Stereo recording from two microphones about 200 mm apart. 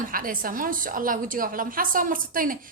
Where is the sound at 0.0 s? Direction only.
45° right (ahead or behind).